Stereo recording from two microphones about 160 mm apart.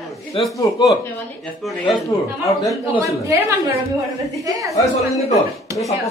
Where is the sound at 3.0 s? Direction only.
20° right (ahead or behind).